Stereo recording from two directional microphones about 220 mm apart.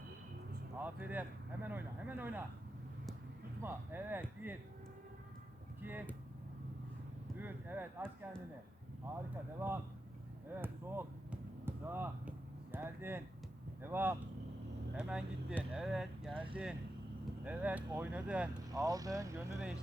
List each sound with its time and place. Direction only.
0.8 s speech: 5° right (ahead or behind)
3.6 s speech: 10° right (ahead or behind)
5.8 s speech: 10° right (ahead or behind)
7.3 s speech: 10° right (ahead or behind)
10.5 s basketball bounce: 10° right (ahead or behind)
12.7 s speech: 10° right (ahead or behind)
16.3 s speech: 25° right (ahead or behind)
17.4 s speech: 5° right (ahead or behind)